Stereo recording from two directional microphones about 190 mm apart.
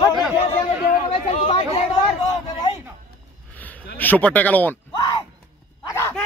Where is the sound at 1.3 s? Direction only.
30° left (ahead or behind).